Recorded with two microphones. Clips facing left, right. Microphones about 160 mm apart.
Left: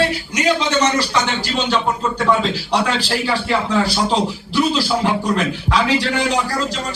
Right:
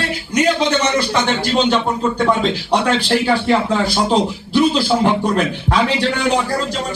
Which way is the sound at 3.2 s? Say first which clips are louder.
Right 4 dB; 45° right (ahead or behind).